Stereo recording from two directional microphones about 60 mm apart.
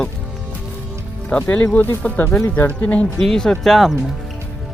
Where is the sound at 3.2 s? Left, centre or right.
Centre.